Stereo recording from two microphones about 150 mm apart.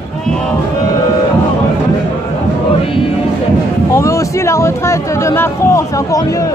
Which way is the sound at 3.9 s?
20° left (ahead or behind).